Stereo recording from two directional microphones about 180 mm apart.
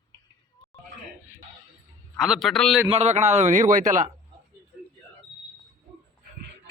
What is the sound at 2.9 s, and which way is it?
A man's voice, 35° right (ahead or behind).